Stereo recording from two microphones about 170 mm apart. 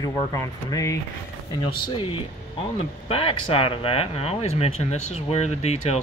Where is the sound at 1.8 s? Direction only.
30° left (ahead or behind).